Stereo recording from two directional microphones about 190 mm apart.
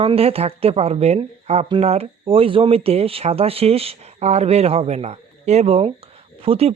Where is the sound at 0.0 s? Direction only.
30° right (ahead or behind).